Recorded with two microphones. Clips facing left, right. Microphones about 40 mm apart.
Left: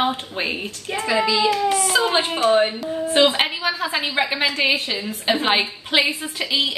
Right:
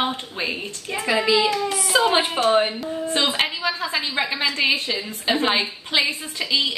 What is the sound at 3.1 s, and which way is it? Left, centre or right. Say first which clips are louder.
A woman's voice: left 5 dB; left.